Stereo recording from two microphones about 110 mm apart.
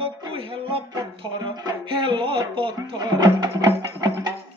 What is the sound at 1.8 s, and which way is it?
Mantra, 50° right (ahead or behind).